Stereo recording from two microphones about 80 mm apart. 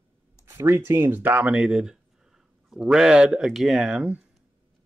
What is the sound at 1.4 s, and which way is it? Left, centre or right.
A man's voice, centre.